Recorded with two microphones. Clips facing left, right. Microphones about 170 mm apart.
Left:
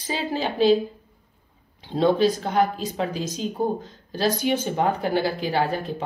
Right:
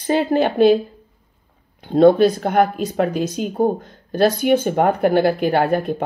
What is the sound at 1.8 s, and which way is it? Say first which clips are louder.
Speech: right 8 dB; 55° right (ahead or behind).